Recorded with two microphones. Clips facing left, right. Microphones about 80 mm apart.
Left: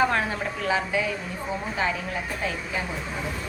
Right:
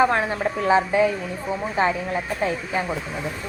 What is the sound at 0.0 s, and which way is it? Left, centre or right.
A woman's voice, right.